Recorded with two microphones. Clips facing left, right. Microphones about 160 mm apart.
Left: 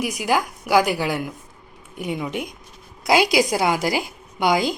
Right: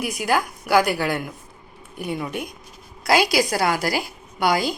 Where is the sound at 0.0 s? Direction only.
15° left (ahead or behind).